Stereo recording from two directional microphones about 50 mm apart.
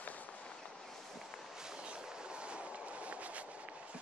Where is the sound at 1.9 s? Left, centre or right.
Right.